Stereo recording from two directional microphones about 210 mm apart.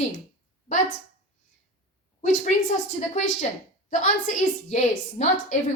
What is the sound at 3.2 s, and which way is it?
A woman's voice, 35° left (ahead or behind).